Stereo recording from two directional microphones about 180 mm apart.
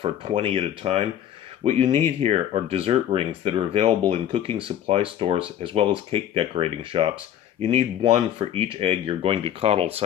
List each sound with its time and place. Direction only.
0.0 s speech: 30° right (ahead or behind)